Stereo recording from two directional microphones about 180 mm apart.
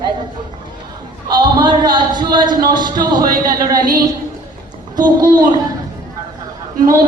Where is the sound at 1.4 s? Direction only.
25° right (ahead or behind).